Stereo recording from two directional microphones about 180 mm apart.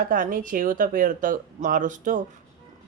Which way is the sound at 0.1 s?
50° right (ahead or behind).